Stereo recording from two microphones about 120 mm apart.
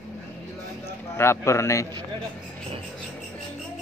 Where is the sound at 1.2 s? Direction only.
20° left (ahead or behind).